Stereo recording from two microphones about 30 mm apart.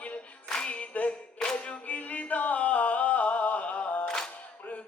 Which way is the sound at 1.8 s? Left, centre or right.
Left.